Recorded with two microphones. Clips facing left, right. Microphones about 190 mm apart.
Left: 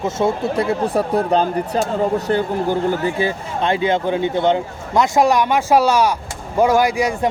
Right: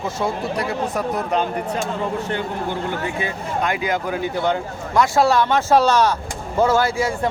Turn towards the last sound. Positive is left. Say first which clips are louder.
# left 3 dB
turn(degrees=15)  # may be behind; listen again after turning